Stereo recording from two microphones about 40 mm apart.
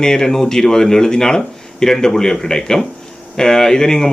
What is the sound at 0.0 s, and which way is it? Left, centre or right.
Speech, centre.